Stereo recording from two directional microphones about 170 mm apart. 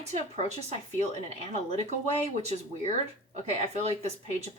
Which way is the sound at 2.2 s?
40° right (ahead or behind).